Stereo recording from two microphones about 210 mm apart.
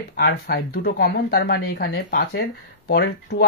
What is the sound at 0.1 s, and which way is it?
Speech, 50° left (ahead or behind).